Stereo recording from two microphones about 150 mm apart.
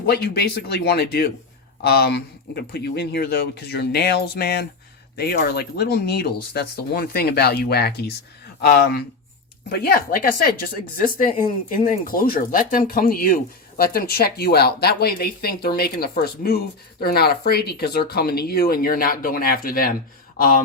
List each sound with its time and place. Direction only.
0.0 s a woman's voice: 90° left